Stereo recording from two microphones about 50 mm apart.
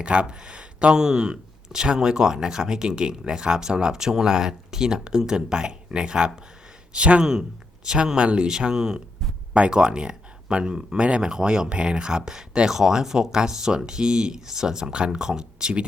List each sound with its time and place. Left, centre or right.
0.0 s speech: right
0.9 s speech: centre